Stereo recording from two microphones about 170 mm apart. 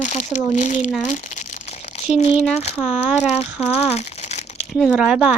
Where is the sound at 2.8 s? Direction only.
10° right (ahead or behind).